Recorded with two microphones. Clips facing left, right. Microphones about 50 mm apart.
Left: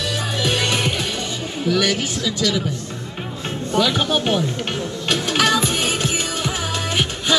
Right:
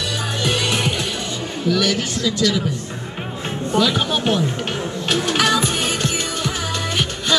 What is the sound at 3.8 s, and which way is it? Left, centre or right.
Speech, centre.